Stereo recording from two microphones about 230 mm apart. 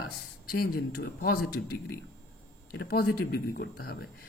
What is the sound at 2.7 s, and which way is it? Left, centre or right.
Speech, left.